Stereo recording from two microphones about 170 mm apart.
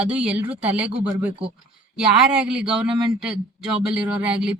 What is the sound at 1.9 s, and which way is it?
Speech, 5° right (ahead or behind).